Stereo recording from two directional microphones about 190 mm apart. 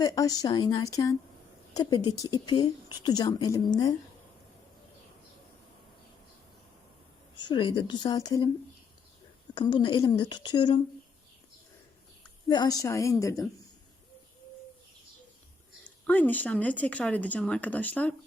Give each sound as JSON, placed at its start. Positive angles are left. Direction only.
{"t": 0.0, "sound": "speech", "side_deg": 20}
{"t": 7.3, "sound": "speech", "side_deg": 25}
{"t": 9.6, "sound": "speech", "side_deg": 20}
{"t": 12.5, "sound": "speech", "side_deg": 20}
{"t": 16.0, "sound": "speech", "side_deg": 10}